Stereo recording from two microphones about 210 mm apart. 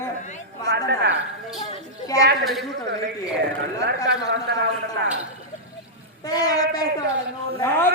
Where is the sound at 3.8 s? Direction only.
55° right (ahead or behind).